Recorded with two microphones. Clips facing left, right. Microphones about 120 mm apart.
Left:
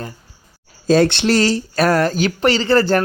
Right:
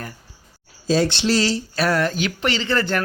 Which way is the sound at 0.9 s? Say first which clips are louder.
Left 5 dB; 60° left (ahead or behind).